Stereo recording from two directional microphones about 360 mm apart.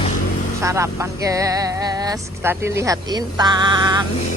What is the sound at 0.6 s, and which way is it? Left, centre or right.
Speech, centre.